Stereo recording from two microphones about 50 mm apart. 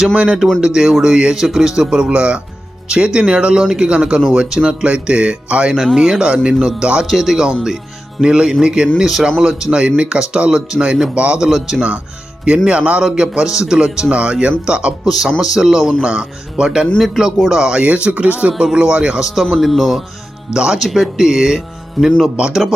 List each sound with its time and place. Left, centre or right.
0.1 s speech: right
5.7 s speech: centre
6.0 s speech: centre
7.1 s speech: centre; by 11.3 s right
11.3 s speech: centre
12.6 s speech: right
15.4 s speech: centre
16.0 s speech: centre
17.8 s speech: right
19.2 s speech: centre
20.5 s speech: centre
22.0 s speech: centre
22.4 s speech: centre